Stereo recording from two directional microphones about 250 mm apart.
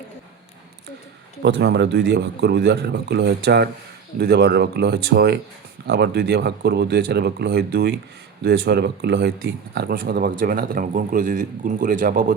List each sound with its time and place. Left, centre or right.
1.4 s speech: right